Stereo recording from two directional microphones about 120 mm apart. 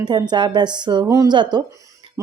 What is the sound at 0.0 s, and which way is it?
A woman's voice, 35° right (ahead or behind).